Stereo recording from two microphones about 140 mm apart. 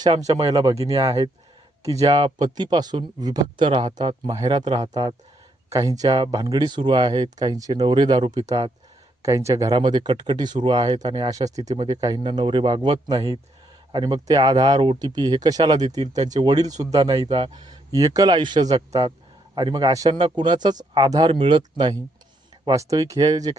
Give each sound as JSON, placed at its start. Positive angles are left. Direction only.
{"t": 0.0, "sound": "speech", "side_deg": -25}
{"t": 22.6, "sound": "speech", "side_deg": -25}